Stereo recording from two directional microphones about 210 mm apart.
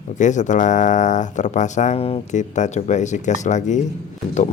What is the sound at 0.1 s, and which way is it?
Speech, 35° left (ahead or behind).